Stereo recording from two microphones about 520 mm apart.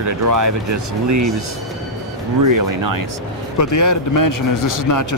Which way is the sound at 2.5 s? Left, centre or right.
Right.